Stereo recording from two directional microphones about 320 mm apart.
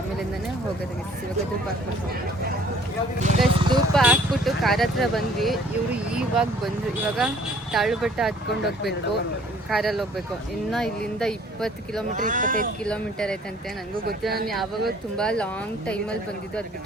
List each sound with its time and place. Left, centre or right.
3.2 s speech: centre
3.9 s speech: centre
7.7 s speech: centre
12.1 s speech: right
12.8 s speech: centre
14.1 s speech: right
14.4 s speech: centre